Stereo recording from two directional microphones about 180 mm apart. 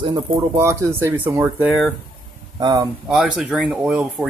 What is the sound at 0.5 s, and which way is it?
Speech, 15° right (ahead or behind).